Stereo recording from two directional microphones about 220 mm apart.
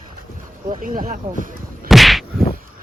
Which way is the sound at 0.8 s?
40° right (ahead or behind).